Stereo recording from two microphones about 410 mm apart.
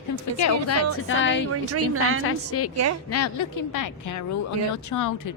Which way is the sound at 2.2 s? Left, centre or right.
Left.